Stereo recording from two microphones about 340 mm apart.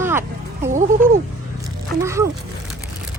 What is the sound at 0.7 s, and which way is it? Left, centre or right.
Music, right.